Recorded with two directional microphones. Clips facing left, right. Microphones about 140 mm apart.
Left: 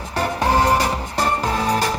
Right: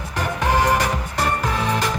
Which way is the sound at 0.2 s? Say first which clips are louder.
Left 2 dB; 35° left (ahead or behind).